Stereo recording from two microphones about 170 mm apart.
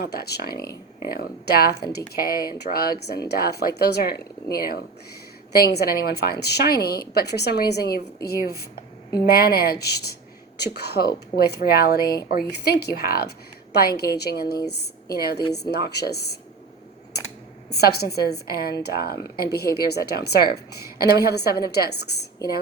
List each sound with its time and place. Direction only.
0.0 s a woman's voice: 70° left (ahead or behind)
5.5 s a woman's voice: 65° left (ahead or behind)
17.7 s a woman's voice: 70° left (ahead or behind)